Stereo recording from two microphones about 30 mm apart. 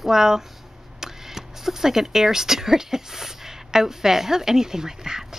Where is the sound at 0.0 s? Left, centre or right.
Centre.